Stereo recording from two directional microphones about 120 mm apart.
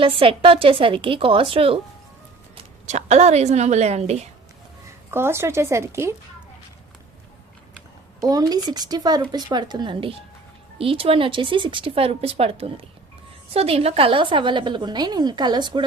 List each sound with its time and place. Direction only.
0.0 s speech: 50° right (ahead or behind)
2.8 s a woman's voice: 70° right (ahead or behind)
5.1 s speech: 20° right (ahead or behind)
8.2 s a woman's voice: 30° right (ahead or behind)